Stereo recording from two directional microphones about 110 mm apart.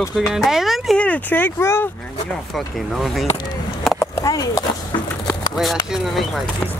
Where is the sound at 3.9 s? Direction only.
35° left (ahead or behind).